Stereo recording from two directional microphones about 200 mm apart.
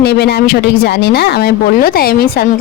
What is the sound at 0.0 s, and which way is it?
Speech, 55° left (ahead or behind).